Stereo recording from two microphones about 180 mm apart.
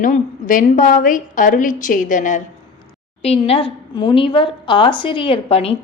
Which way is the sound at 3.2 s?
35° left (ahead or behind).